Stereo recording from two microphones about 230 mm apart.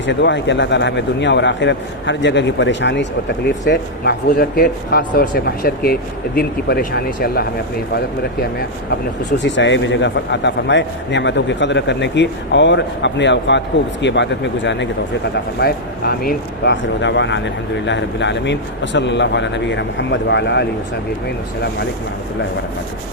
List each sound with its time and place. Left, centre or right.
0.0 s speech: left
9.4 s speech: left